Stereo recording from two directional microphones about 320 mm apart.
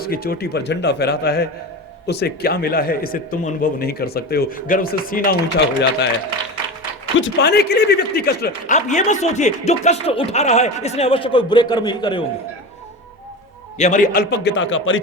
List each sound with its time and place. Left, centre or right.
0.0 s speech: left
7.2 s speech: left; by 12.2 s centre
13.7 s a man's voice: left